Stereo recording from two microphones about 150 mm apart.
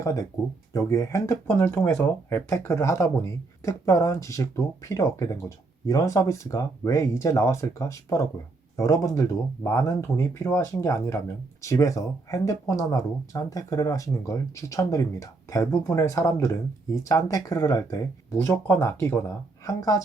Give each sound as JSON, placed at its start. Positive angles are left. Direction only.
{"t": 0.0, "sound": "speech", "side_deg": 20}